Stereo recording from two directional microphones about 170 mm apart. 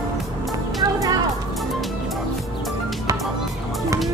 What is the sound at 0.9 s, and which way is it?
Music, 20° right (ahead or behind).